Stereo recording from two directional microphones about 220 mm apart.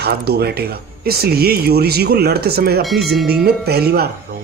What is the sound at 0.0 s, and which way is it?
Speech, 45° right (ahead or behind).